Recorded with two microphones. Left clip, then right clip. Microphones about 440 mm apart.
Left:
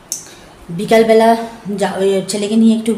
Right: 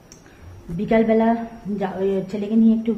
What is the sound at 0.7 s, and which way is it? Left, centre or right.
Speech, right.